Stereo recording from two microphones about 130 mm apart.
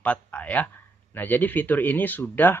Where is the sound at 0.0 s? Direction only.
10° left (ahead or behind).